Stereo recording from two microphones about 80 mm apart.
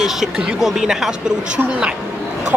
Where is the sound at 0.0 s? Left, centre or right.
Centre.